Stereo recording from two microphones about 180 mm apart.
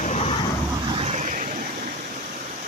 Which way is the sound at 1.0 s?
40° right (ahead or behind).